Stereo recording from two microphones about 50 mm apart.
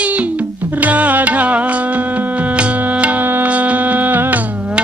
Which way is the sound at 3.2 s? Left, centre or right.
Right.